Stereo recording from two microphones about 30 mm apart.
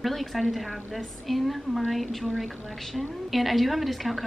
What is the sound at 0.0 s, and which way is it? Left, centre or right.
A woman's voice, centre.